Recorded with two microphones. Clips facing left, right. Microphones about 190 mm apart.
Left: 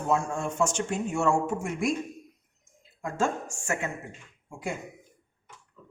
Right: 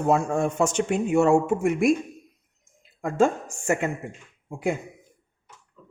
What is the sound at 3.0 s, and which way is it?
Speech, 60° right (ahead or behind).